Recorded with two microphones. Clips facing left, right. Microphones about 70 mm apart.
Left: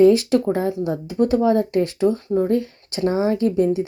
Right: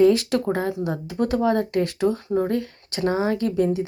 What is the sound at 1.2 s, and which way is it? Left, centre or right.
Speech, centre.